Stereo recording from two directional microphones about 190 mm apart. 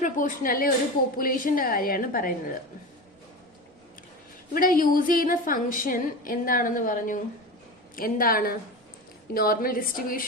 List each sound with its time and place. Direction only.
0.0 s a woman's voice: 45° left (ahead or behind)
4.5 s a woman's voice: 45° left (ahead or behind)